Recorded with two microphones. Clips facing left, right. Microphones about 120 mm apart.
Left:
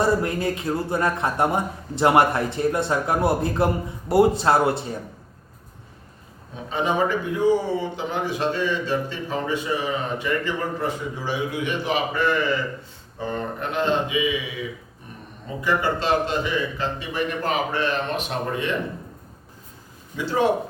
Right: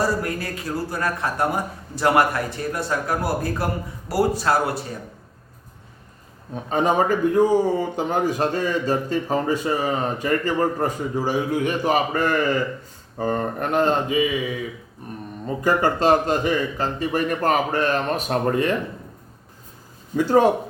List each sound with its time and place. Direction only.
0.0 s speech: 25° left (ahead or behind)
6.7 s a man's voice: 45° right (ahead or behind)
15.4 s a man's voice: 45° right (ahead or behind)
20.1 s a man's voice: 45° right (ahead or behind)